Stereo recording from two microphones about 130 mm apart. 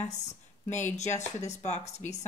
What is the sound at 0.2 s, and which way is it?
Speech, 65° left (ahead or behind).